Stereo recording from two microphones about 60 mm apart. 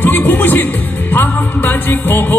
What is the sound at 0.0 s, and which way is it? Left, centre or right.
Music, left.